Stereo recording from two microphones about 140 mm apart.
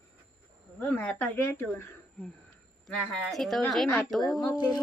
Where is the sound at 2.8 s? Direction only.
Centre (ahead or behind).